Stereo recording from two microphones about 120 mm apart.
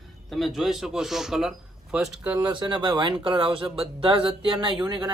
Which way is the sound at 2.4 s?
40° right (ahead or behind).